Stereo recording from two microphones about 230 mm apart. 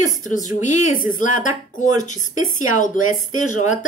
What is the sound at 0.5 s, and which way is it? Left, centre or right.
Speech, left.